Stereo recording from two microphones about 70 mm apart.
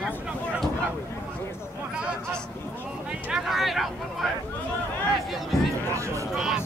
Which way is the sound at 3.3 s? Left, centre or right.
Centre.